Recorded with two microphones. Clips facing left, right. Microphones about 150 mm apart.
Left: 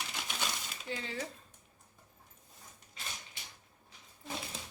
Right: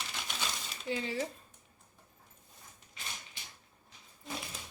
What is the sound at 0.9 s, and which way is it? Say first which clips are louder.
Speech: right 5 dB; 15° right (ahead or behind).